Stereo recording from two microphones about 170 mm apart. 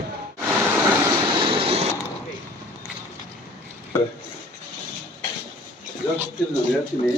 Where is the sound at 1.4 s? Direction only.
30° right (ahead or behind).